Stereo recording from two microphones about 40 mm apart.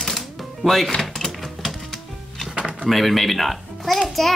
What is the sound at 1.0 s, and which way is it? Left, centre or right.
Typewriter, centre.